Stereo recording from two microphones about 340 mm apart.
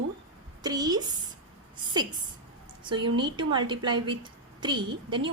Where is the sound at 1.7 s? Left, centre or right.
Centre.